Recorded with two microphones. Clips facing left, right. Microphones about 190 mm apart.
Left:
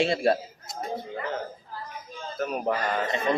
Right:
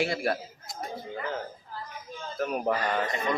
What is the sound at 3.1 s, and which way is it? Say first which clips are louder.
Speech: left 4 dB; 25° left (ahead or behind).